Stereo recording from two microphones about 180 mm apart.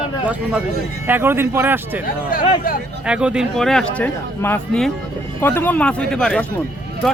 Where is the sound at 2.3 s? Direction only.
50° left (ahead or behind).